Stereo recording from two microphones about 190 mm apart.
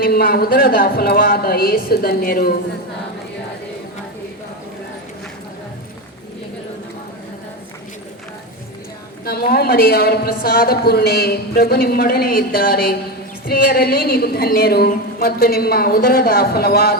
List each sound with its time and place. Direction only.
0.0 s a man's voice: 55° left (ahead or behind)
9.2 s a man's voice: 55° left (ahead or behind)